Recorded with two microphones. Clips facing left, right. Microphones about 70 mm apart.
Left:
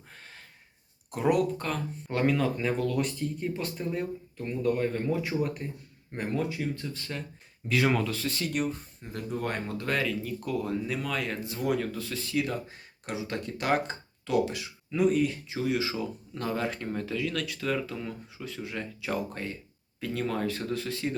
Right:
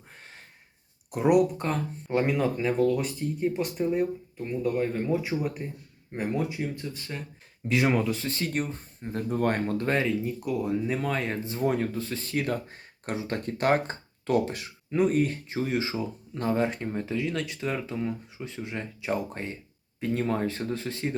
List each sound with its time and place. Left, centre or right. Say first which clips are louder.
1.1 s speech: right 4 dB; centre
2.6 s speech: right 4 dB; centre
3.4 s speech: right 9 dB; centre
8.2 s speech: even; right
10.4 s speech: right 1 dB; centre
10.8 s speech: right 3 dB; right